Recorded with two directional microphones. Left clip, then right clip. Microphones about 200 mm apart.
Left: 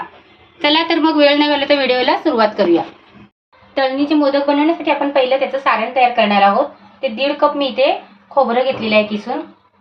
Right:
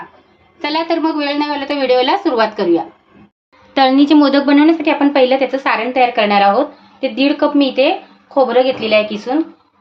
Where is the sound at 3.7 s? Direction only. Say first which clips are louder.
Right 5 dB; 55° right (ahead or behind).